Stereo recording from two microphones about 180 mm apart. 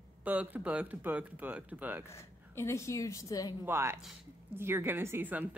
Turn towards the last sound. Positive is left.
turn(degrees=-10)  # may be behind; listen again after turning